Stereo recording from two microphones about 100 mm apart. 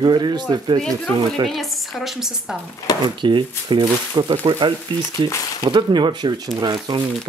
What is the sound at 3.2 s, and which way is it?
Speech, 55° right (ahead or behind).